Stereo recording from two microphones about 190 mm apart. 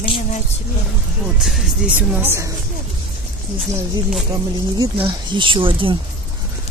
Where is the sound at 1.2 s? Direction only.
Centre (ahead or behind).